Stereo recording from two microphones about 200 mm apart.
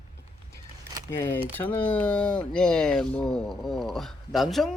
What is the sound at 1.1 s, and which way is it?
Speech, 10° left (ahead or behind).